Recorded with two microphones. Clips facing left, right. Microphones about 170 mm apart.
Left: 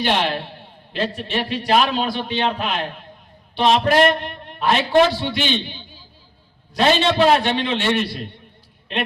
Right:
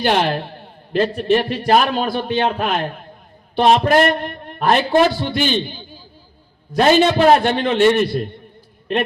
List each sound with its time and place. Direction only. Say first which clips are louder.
0.0 s a man's voice: right 3 dB; 45° right (ahead or behind)
7.1 s a man's voice: right 3 dB; 45° right (ahead or behind)